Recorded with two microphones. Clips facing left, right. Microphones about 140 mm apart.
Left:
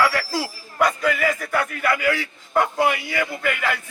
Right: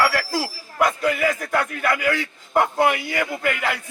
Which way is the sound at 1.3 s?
20° right (ahead or behind).